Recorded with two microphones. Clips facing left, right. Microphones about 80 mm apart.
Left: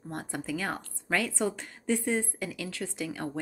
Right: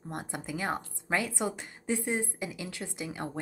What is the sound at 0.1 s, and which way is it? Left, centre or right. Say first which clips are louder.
A woman's voice: left 3 dB; centre.